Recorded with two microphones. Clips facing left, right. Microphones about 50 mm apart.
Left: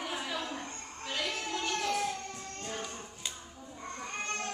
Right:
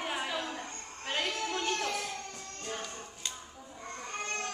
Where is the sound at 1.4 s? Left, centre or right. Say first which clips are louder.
Right 1 dB; right.